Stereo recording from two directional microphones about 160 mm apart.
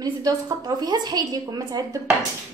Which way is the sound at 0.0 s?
25° right (ahead or behind).